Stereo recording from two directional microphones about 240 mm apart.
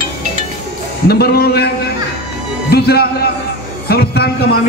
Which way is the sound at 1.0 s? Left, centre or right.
Left.